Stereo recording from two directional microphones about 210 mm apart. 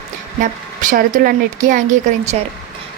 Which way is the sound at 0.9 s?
40° right (ahead or behind).